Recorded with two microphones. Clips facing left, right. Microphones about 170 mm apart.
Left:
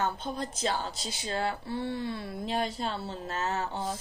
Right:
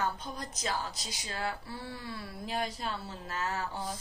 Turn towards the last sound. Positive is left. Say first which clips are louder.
# left 4 dB
turn(degrees=25)  # may be behind; listen again after turning